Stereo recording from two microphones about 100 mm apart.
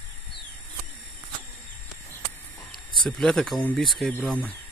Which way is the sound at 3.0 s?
5° left (ahead or behind).